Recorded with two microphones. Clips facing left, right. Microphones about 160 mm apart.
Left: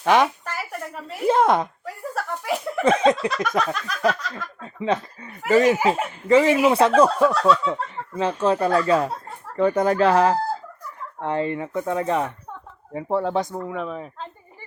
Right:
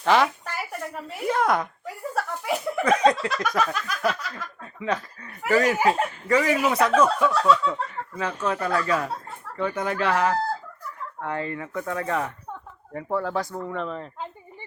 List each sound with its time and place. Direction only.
0.0 s speech: 15° left (ahead or behind)
0.4 s a sound: centre (ahead or behind)
1.3 s speech: 25° left (ahead or behind)
1.8 s chuckle: centre (ahead or behind)
2.8 s speech: 25° left (ahead or behind)
3.6 s a sound: centre (ahead or behind)
4.6 s speech: 25° left (ahead or behind)
7.6 s speech: 25° left (ahead or behind)
13.7 s speech: 5° left (ahead or behind)